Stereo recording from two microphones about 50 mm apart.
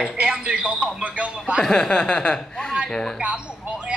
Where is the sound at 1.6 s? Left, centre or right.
Centre.